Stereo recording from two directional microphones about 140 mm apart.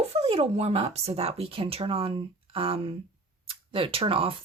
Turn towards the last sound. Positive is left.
turn(degrees=-40)  # may be behind; listen again after turning